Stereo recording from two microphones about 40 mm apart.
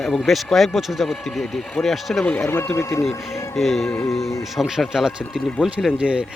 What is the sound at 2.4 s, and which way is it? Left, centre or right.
Speech, left.